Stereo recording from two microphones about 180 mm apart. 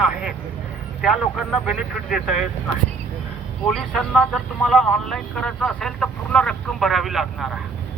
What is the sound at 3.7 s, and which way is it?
Speech, centre (ahead or behind).